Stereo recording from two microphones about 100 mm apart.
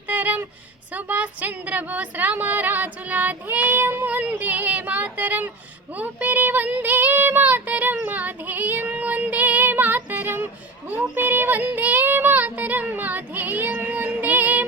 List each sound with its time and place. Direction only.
0.1 s a sound: 15° right (ahead or behind)
0.9 s speech: 15° right (ahead or behind)
5.9 s child singing: 15° right (ahead or behind)